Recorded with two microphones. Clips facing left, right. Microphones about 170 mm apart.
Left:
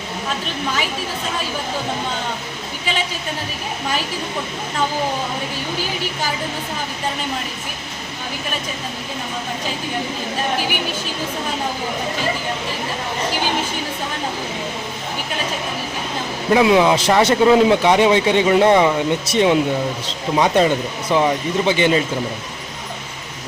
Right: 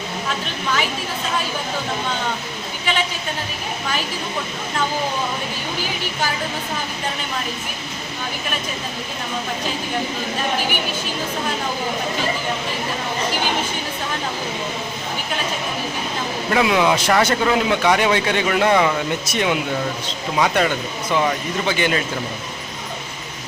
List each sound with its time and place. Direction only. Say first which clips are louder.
16.5 s speech: left 4 dB; 20° left (ahead or behind)